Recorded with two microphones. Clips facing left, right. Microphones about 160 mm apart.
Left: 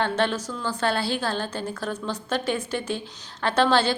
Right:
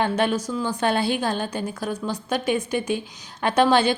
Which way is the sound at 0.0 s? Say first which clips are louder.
Right 2 dB; 10° right (ahead or behind).